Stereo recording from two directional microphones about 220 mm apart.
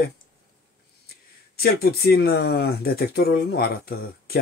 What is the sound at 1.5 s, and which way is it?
Speech, 45° left (ahead or behind).